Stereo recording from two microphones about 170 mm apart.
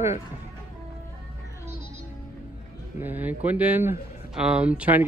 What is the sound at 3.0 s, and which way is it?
Speech, 10° right (ahead or behind).